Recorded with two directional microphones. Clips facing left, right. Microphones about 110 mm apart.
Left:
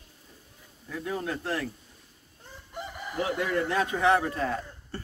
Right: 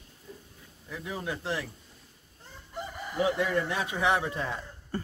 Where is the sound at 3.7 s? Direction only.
15° right (ahead or behind).